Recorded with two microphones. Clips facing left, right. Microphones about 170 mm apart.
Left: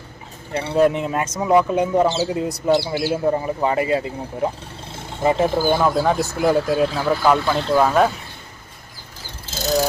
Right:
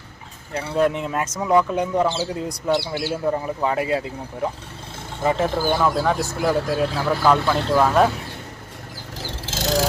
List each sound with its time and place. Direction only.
0.5 s speech: 5° left (ahead or behind)
5.2 s speech: 15° left (ahead or behind)
6.7 s speech: 5° left (ahead or behind)
9.1 s vehicle: 90° right